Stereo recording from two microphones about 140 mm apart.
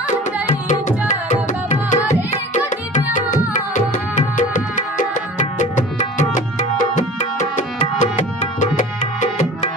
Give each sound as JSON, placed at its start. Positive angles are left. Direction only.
{"t": 0.7, "sound": "music", "side_deg": 60}
{"t": 2.9, "sound": "music", "side_deg": 65}
{"t": 7.3, "sound": "tabla", "side_deg": 60}